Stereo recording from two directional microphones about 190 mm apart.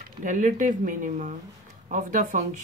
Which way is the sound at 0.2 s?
40° right (ahead or behind).